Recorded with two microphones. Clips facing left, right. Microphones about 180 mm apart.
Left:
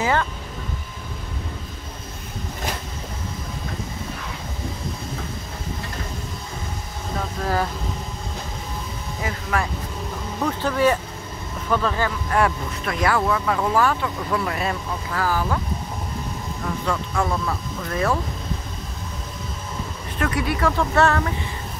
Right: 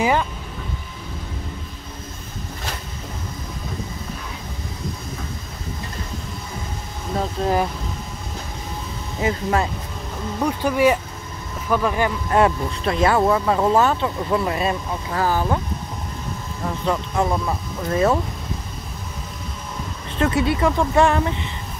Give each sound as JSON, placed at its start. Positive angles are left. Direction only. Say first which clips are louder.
{"t": 0.0, "sound": "vehicle", "louder": "right 2 dB", "side_deg": -15}
{"t": 7.4, "sound": "speech", "louder": "right 4 dB", "side_deg": -25}
{"t": 9.2, "sound": "speech", "louder": "right 5 dB", "side_deg": -25}
{"t": 10.4, "sound": "speech", "louder": "right 2 dB", "side_deg": -10}
{"t": 16.8, "sound": "speech", "louder": "right 3 dB", "side_deg": -20}
{"t": 20.2, "sound": "speech", "louder": "right 4 dB", "side_deg": -25}